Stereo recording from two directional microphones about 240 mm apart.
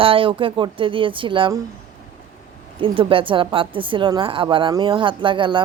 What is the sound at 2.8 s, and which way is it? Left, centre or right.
Speech, right.